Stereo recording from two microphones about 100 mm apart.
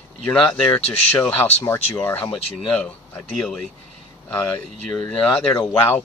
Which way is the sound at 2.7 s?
10° left (ahead or behind).